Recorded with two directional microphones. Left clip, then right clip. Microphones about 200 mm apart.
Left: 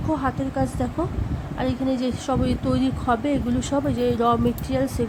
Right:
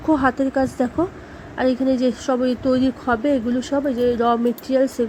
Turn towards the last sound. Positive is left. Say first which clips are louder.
# right 6 dB
turn(degrees=-15)  # may be behind; listen again after turning